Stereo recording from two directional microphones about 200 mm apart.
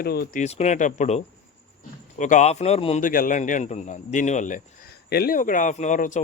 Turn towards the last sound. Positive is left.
turn(degrees=40)  # may be behind; listen again after turning